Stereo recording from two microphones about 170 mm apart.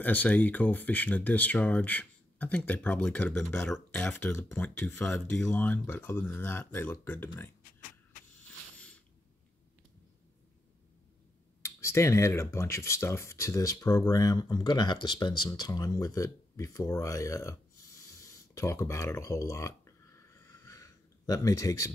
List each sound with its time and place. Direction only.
0.0 s speech: 10° left (ahead or behind)
8.7 s a sound: 5° left (ahead or behind)
11.6 s speech: 15° left (ahead or behind)